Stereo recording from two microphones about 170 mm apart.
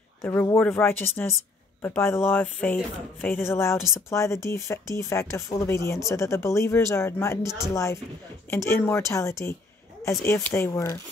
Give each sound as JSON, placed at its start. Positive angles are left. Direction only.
{"t": 0.2, "sound": "speech", "side_deg": 15}